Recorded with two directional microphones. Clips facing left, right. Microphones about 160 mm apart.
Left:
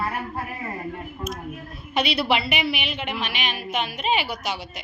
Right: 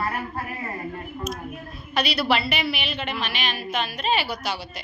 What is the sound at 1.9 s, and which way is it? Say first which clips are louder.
A woman's voice: left 1 dB; 25° left (ahead or behind).